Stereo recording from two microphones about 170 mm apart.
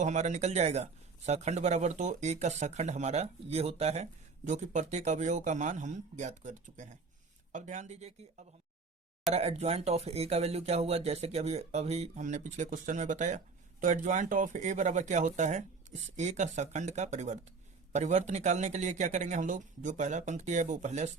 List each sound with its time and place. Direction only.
0.0 s a man's voice: 45° right (ahead or behind)